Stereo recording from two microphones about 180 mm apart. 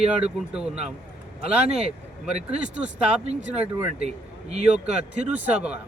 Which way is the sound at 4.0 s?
35° right (ahead or behind).